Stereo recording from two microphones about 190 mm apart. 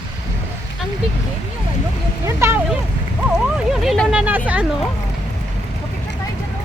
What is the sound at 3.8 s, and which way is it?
Speech, centre (ahead or behind).